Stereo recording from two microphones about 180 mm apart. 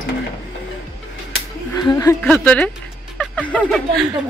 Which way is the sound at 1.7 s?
20° left (ahead or behind).